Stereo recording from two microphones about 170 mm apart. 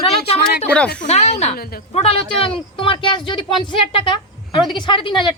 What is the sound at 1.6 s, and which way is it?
Speech, 60° left (ahead or behind).